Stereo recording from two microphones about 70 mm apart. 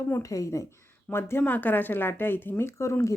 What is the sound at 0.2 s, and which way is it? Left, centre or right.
Speech, left.